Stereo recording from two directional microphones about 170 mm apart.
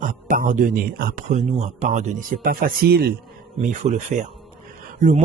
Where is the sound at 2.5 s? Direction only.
60° right (ahead or behind).